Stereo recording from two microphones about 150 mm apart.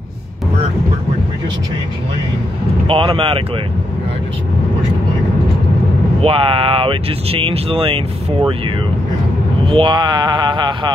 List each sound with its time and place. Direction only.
2.9 s speech: 35° right (ahead or behind)
6.2 s speech: 35° right (ahead or behind)